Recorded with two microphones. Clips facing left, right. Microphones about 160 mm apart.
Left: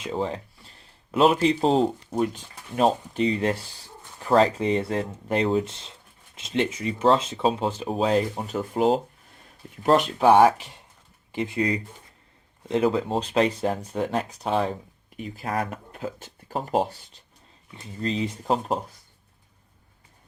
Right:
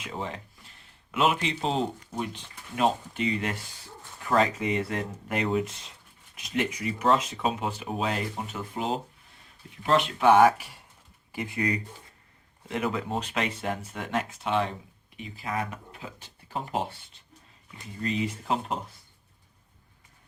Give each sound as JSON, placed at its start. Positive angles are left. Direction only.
{"t": 0.0, "sound": "speech", "side_deg": 35}
{"t": 10.2, "sound": "speech", "side_deg": 35}
{"t": 18.0, "sound": "speech", "side_deg": 30}